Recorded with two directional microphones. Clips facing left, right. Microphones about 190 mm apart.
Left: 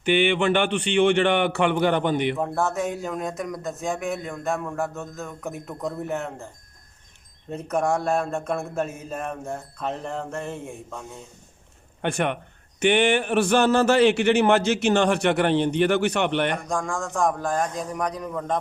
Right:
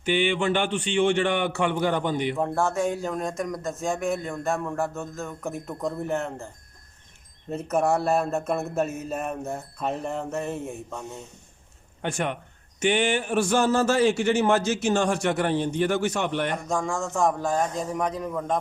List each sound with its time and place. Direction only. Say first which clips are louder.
0.0 s a man's voice: left 3 dB; 65° left (ahead or behind)
2.4 s speech: right 1 dB; centre (ahead or behind)
7.5 s speech: right 1 dB; 5° right (ahead or behind)
12.0 s a man's voice: left 3 dB; 60° left (ahead or behind)
16.6 s speech: even; 5° right (ahead or behind)